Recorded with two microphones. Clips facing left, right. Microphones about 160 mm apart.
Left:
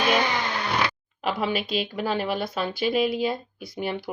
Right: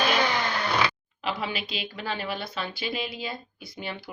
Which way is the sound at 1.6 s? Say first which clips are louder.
Left 7 dB; 45° left (ahead or behind).